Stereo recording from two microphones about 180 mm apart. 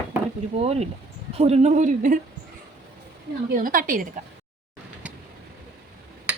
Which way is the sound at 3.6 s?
50° right (ahead or behind).